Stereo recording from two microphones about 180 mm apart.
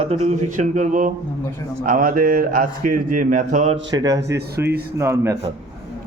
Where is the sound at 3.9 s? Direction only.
20° right (ahead or behind).